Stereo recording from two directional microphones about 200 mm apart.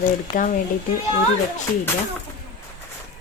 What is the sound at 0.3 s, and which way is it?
Speech, 45° left (ahead or behind).